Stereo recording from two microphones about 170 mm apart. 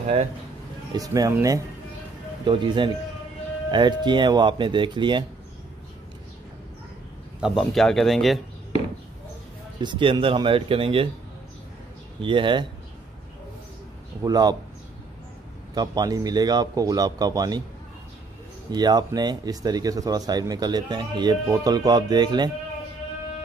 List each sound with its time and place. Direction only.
0.9 s speech: 20° right (ahead or behind)
7.3 s speech: centre (ahead or behind)
9.8 s speech: 30° right (ahead or behind)
12.2 s speech: 30° right (ahead or behind)
14.2 s speech: 25° right (ahead or behind)
15.7 s speech: 25° right (ahead or behind)
18.7 s speech: 25° right (ahead or behind)